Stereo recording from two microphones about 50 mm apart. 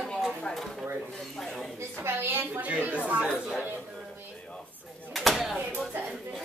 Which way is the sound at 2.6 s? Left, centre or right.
Right.